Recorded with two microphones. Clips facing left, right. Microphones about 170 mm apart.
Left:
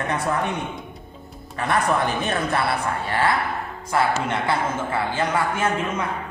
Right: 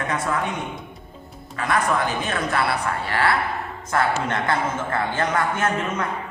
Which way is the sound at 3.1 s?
20° left (ahead or behind).